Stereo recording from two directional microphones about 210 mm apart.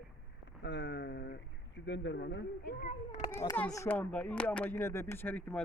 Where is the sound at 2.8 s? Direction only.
35° left (ahead or behind).